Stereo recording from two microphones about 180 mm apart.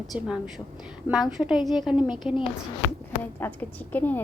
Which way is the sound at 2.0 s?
25° left (ahead or behind).